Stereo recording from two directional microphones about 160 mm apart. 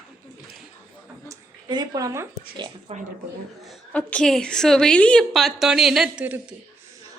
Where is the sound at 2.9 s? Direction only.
35° right (ahead or behind).